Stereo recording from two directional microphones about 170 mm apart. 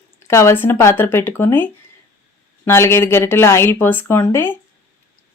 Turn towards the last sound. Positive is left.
turn(degrees=15)  # may be behind; listen again after turning